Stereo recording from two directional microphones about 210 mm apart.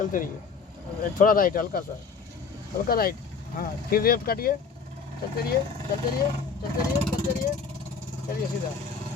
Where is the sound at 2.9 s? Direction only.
45° left (ahead or behind).